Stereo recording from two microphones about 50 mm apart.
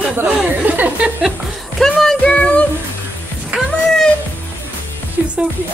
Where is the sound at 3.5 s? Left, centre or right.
Right.